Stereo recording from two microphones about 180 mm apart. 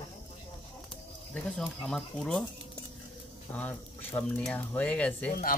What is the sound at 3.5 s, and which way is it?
Speech, 10° left (ahead or behind).